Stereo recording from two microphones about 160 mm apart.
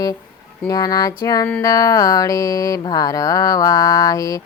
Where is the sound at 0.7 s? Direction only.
25° left (ahead or behind).